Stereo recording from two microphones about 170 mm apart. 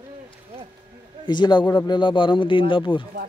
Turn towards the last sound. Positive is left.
turn(degrees=30)  # may be behind; listen again after turning